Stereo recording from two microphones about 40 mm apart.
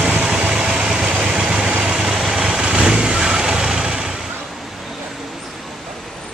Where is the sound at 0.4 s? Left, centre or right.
Right.